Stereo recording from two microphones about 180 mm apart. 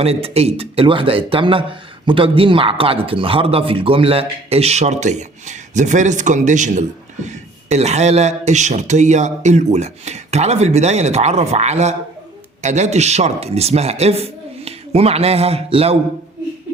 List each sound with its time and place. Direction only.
0.0 s speech: 35° right (ahead or behind)